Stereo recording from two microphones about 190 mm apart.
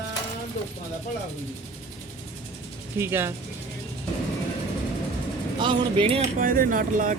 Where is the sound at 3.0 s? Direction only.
10° right (ahead or behind).